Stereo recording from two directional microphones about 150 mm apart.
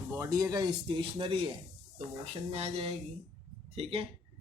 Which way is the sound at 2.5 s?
45° right (ahead or behind).